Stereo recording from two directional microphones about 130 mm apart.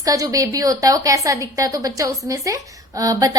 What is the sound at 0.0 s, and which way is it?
A woman's voice, 25° right (ahead or behind).